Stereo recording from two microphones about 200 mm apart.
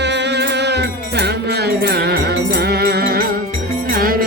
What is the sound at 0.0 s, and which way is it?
Music, 60° right (ahead or behind).